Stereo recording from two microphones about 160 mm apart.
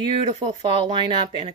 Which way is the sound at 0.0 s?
30° right (ahead or behind).